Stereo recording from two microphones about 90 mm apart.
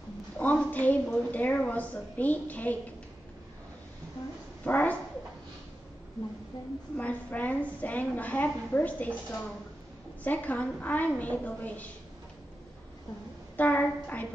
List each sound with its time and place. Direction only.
0.4 s a woman's voice: 15° left (ahead or behind)
4.6 s a woman's voice: 20° left (ahead or behind)
7.0 s a woman's voice: 15° left (ahead or behind)
13.6 s a woman's voice: 15° left (ahead or behind)